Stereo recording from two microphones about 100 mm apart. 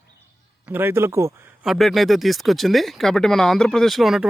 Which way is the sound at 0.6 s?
20° right (ahead or behind).